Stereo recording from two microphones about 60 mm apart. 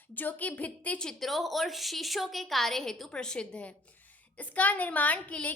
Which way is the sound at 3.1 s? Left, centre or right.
Centre.